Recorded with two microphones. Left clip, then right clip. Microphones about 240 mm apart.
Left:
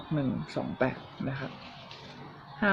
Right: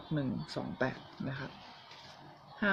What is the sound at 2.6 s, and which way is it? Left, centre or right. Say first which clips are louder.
Speech: left 5 dB; centre.